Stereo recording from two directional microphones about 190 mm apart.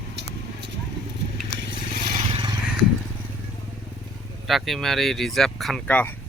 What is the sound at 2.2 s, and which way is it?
Vehicle, 25° right (ahead or behind).